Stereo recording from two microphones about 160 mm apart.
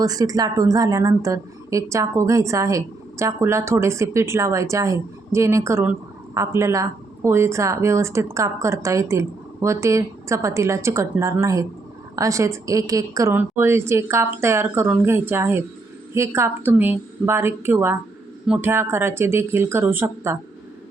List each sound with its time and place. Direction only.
0.0 s a woman's voice: 25° right (ahead or behind)